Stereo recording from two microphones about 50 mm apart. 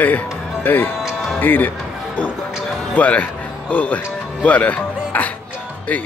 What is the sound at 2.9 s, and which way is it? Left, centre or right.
Speech, left.